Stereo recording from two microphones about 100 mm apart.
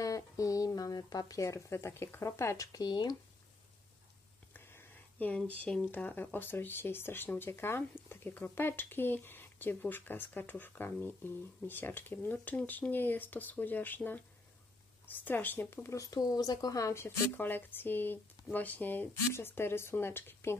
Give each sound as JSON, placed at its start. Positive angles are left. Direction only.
{"t": 0.0, "sound": "speech", "side_deg": 35}
{"t": 4.6, "sound": "speech", "side_deg": 15}